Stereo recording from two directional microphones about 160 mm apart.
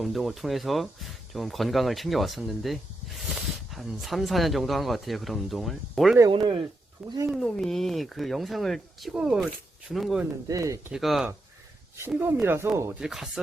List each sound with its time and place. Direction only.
0.0 s speech: centre (ahead or behind)
6.3 s speech: 30° right (ahead or behind)
7.3 s speech: centre (ahead or behind)
10.5 s speech: 20° right (ahead or behind)
10.9 s speech: centre (ahead or behind)
11.9 s speech: 15° right (ahead or behind)
13.0 s speech: 5° right (ahead or behind)